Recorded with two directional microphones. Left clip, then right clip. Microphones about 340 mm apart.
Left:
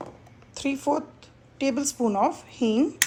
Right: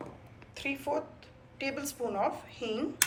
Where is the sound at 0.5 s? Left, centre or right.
Centre.